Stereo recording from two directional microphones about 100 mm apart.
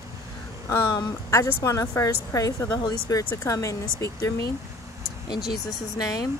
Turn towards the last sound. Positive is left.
turn(degrees=40)  # may be behind; listen again after turning